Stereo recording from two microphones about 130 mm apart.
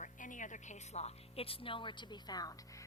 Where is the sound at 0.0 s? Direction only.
80° left.